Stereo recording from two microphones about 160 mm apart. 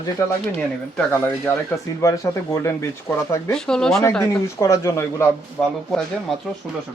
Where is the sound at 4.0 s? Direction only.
15° left (ahead or behind).